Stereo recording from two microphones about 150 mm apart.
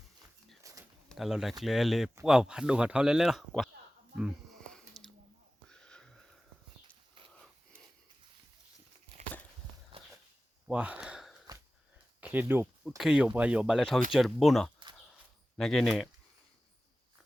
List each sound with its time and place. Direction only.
0.6 s a sound: 20° right (ahead or behind)
1.0 s speech: centre (ahead or behind)
4.1 s wheeze: 5° right (ahead or behind)
4.6 s a sound: 5° left (ahead or behind)
5.6 s wheeze: 5° left (ahead or behind)
10.7 s sigh: 10° right (ahead or behind)
12.2 s speech: 10° right (ahead or behind)